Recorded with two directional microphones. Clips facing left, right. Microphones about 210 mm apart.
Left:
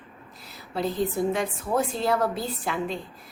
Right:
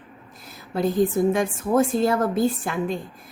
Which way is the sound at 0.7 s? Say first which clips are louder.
Right 6 dB; 50° right (ahead or behind).